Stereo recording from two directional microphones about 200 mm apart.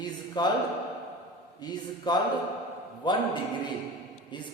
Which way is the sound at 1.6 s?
20° left (ahead or behind).